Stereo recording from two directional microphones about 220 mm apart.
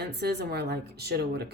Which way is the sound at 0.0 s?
45° right (ahead or behind).